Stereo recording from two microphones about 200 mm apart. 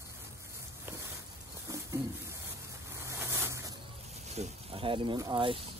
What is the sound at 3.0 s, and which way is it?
Vehicle, 15° right (ahead or behind).